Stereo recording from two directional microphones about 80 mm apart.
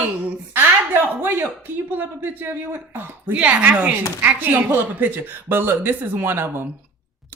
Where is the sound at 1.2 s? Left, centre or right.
Right.